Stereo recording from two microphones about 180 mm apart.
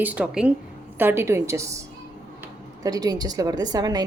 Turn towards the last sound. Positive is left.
turn(degrees=-20)  # may be behind; listen again after turning